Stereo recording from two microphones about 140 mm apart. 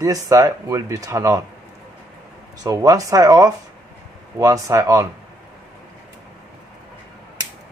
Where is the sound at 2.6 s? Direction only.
25° right (ahead or behind).